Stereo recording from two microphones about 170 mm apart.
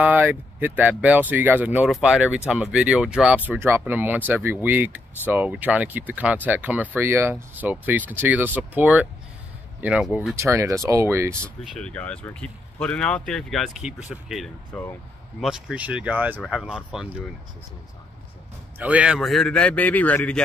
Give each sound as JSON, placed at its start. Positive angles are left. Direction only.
{"t": 0.0, "sound": "speech", "side_deg": -10}
{"t": 10.3, "sound": "speech", "side_deg": -15}
{"t": 11.3, "sound": "speech", "side_deg": 5}
{"t": 18.8, "sound": "speech", "side_deg": -10}